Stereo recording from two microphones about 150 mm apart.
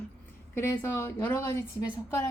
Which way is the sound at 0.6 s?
15° left (ahead or behind).